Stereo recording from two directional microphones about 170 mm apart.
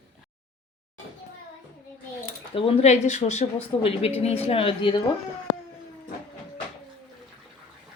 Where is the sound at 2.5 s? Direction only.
35° left (ahead or behind).